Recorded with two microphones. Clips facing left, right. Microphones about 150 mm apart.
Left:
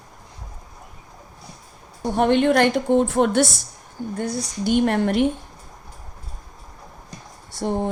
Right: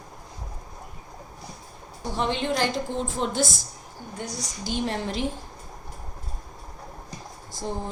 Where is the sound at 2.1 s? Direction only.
55° left (ahead or behind).